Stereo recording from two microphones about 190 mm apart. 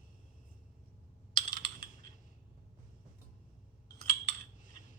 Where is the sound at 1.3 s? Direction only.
25° left (ahead or behind).